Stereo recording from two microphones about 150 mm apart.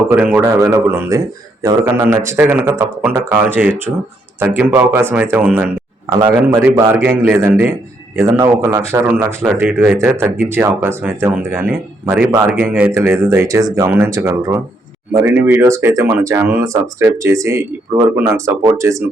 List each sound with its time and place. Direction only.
0.1 s speech: 10° right (ahead or behind)
6.1 s speech: 25° right (ahead or behind)
6.7 s speech: 15° right (ahead or behind)